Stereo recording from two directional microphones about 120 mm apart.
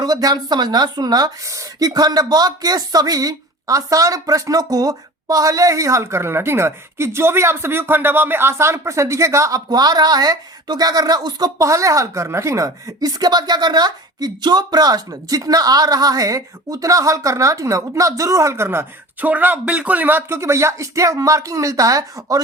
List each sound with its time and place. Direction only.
0.0 s a woman's voice: 30° right (ahead or behind)